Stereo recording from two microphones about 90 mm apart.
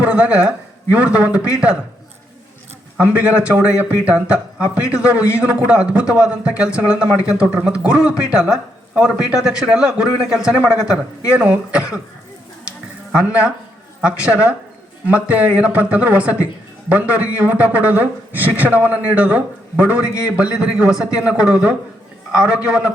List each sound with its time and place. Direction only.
0.0 s speech: 15° right (ahead or behind)
3.0 s speech: 15° right (ahead or behind)
13.1 s speech: 15° right (ahead or behind)